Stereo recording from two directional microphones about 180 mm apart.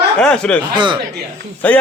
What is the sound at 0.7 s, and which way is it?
Speech, 25° right (ahead or behind).